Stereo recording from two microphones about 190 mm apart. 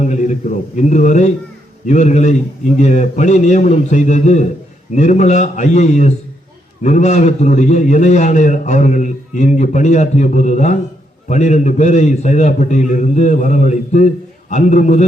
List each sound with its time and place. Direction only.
0.0 s a man's voice: 40° left (ahead or behind)